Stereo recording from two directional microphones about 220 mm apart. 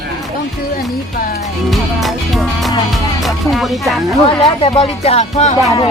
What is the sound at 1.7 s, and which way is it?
Music, centre (ahead or behind).